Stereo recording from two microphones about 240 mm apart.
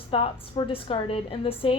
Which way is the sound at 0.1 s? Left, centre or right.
Left.